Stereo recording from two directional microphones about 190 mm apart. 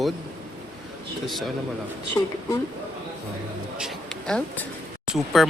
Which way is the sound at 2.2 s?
25° left (ahead or behind).